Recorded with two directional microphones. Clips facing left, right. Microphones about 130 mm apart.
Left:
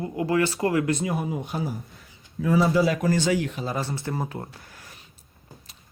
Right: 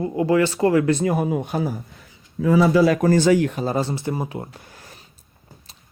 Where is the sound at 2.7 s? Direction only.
90° right.